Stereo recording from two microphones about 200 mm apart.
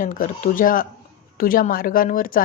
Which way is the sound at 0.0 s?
40° left (ahead or behind).